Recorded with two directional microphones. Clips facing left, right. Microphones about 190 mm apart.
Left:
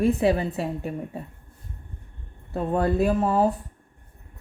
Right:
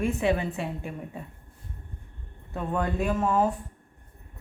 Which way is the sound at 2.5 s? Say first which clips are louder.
Left 6 dB; 35° left (ahead or behind).